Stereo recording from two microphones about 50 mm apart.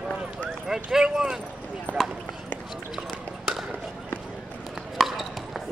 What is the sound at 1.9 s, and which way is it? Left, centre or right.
Clip-clop, right.